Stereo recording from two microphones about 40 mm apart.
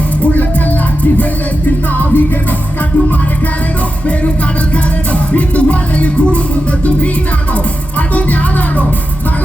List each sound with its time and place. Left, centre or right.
0.2 s music: left
4.7 s music: left